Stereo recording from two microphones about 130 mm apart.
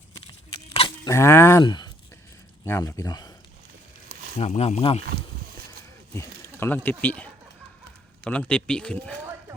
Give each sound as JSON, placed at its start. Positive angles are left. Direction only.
{"t": 1.0, "sound": "speech", "side_deg": 20}
{"t": 1.6, "sound": "speech", "side_deg": 35}
{"t": 2.6, "sound": "speech", "side_deg": 20}
{"t": 4.4, "sound": "speech", "side_deg": 55}
{"t": 6.1, "sound": "speech", "side_deg": 15}